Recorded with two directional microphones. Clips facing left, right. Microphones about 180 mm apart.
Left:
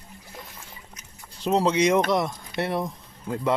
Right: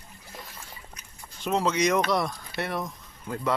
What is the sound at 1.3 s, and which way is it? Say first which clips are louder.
Speech: left 4 dB; 35° left (ahead or behind).